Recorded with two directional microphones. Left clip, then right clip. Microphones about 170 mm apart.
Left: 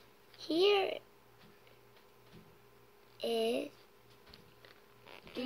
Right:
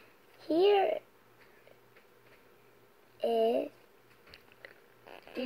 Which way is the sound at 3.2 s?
30° left (ahead or behind).